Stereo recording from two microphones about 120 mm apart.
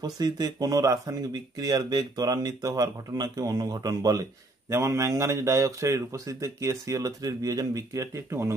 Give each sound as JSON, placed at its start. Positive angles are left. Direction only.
{"t": 0.0, "sound": "speech", "side_deg": -30}